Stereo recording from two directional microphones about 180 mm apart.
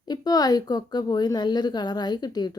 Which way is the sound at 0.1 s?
20° left (ahead or behind).